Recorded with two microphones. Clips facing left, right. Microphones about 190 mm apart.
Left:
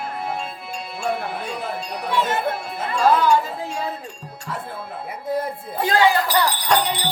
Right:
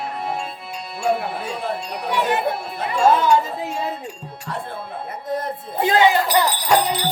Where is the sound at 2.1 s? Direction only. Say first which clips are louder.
Right 1 dB; 15° right (ahead or behind).